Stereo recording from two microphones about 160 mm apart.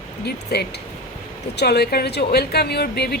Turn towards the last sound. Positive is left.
turn(degrees=80)